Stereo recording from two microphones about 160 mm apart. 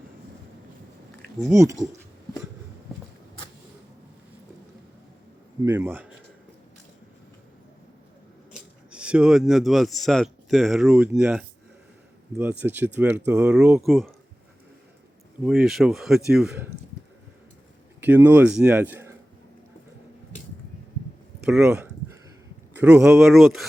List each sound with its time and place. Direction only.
1.5 s speech: 20° right (ahead or behind)
5.6 s speech: 15° right (ahead or behind)
8.5 s speech: 5° right (ahead or behind)
15.4 s speech: centre (ahead or behind)
18.0 s speech: 10° right (ahead or behind)
21.4 s speech: 5° right (ahead or behind)